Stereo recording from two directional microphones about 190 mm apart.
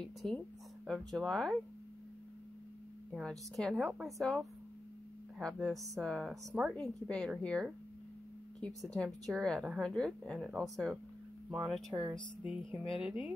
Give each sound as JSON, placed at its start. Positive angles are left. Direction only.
{"t": 0.0, "sound": "speech", "side_deg": 5}
{"t": 3.1, "sound": "speech", "side_deg": 0}
{"t": 11.9, "sound": "speech", "side_deg": -25}
{"t": 12.4, "sound": "speech", "side_deg": -10}